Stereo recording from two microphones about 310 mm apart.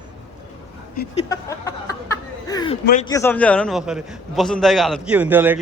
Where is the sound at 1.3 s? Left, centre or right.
Centre.